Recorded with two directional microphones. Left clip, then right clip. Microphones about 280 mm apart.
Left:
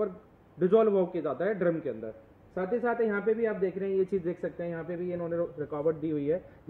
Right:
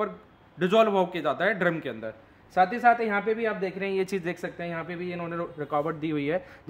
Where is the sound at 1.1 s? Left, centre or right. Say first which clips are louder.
Right 4 dB; right.